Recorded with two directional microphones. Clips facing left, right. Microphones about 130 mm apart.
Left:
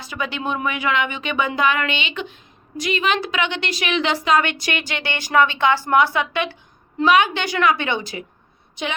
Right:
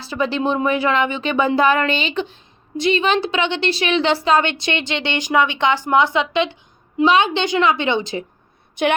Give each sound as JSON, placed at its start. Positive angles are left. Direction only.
{"t": 0.0, "sound": "a woman's voice", "side_deg": -30}
{"t": 8.7, "sound": "a woman's voice", "side_deg": -55}